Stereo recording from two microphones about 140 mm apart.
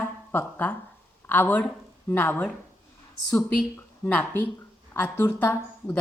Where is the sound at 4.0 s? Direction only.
15° left (ahead or behind).